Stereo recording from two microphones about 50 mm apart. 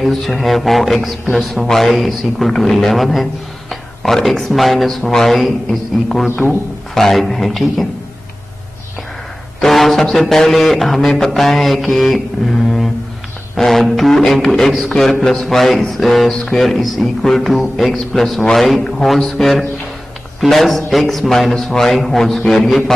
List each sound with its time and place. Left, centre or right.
0.0 s speech: centre
9.6 s speech: centre